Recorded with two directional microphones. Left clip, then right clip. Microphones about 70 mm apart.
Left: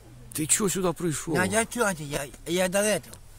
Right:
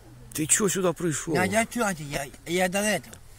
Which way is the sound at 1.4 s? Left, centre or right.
Left.